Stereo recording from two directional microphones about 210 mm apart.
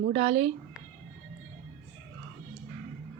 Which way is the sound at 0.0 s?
30° right (ahead or behind).